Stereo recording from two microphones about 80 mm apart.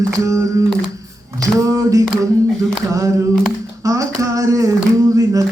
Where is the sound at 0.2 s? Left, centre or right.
Right.